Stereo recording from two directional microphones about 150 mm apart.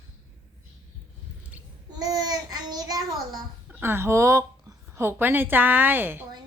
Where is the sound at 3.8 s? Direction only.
15° right (ahead or behind).